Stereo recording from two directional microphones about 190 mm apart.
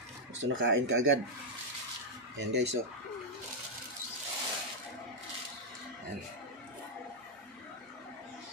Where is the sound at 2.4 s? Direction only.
65° right (ahead or behind).